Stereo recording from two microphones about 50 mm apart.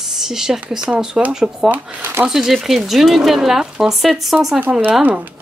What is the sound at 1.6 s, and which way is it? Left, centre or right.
Speech, right.